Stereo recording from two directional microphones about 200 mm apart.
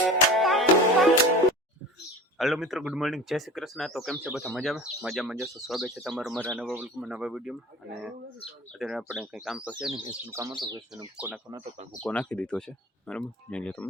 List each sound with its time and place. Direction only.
0.0 s music: centre (ahead or behind)
2.4 s speech: centre (ahead or behind)
8.8 s speech: centre (ahead or behind)
9.9 s speech: 20° right (ahead or behind)
10.9 s speech: 5° right (ahead or behind)
11.9 s speech: 5° left (ahead or behind)